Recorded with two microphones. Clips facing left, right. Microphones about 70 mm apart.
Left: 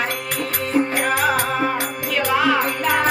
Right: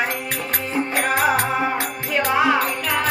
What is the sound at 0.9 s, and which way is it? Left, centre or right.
Music, right.